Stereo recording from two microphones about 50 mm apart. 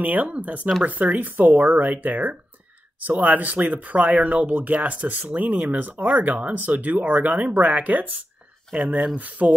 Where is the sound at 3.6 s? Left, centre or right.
Right.